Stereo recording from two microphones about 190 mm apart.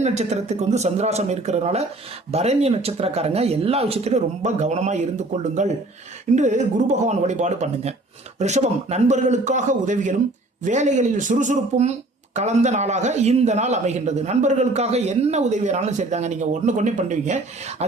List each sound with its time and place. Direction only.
0.0 s speech: 35° right (ahead or behind)